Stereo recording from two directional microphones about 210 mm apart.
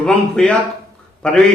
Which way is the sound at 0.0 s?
5° left (ahead or behind).